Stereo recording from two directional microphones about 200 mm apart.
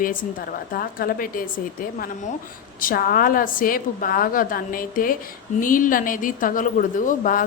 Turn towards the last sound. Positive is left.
turn(degrees=40)  # may be behind; listen again after turning